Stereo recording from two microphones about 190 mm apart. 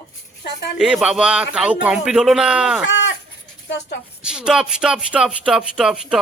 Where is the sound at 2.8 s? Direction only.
70° left (ahead or behind).